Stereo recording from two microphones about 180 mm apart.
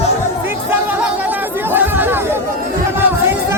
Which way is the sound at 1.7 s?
10° right (ahead or behind).